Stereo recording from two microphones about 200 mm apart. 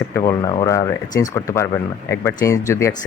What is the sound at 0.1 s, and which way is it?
Speech, 15° left (ahead or behind).